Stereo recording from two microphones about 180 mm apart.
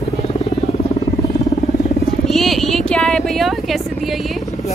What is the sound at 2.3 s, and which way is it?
Vehicle, centre (ahead or behind).